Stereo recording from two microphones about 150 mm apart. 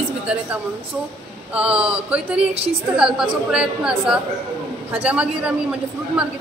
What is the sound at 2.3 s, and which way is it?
Speech, 40° right (ahead or behind).